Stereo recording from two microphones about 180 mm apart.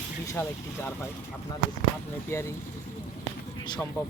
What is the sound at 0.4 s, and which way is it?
Speech, 15° left (ahead or behind).